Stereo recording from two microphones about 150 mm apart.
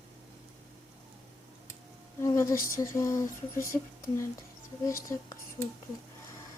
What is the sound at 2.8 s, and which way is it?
Speech, 20° left (ahead or behind).